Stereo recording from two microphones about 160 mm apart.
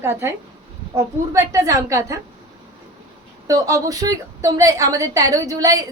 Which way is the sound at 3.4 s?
20° right (ahead or behind).